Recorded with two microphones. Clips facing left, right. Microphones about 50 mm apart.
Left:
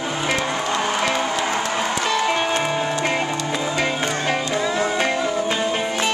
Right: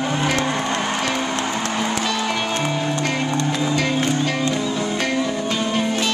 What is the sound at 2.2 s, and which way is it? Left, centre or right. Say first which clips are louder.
Music: left 2 dB; left.